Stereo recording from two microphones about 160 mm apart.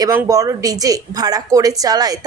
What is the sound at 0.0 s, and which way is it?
Speech, 20° right (ahead or behind).